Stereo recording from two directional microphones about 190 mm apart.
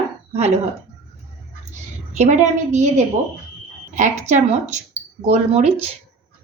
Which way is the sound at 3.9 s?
40° right (ahead or behind).